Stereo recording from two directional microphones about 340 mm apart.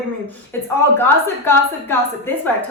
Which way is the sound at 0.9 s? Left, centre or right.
Centre.